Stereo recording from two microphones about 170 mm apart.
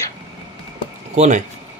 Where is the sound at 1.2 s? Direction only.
45° right (ahead or behind).